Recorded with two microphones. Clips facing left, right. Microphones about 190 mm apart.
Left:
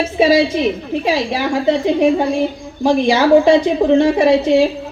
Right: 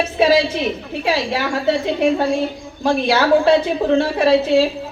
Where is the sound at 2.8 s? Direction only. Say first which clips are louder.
Left 4 dB; 15° left (ahead or behind).